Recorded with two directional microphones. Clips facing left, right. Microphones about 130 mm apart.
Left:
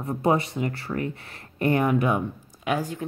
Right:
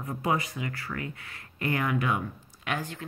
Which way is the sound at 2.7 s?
10° left (ahead or behind).